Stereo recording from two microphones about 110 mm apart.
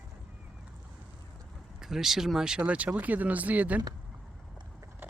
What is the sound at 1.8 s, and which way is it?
Speech, 5° right (ahead or behind).